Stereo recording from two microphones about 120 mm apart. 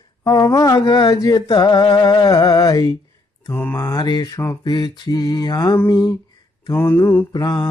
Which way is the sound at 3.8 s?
35° left (ahead or behind).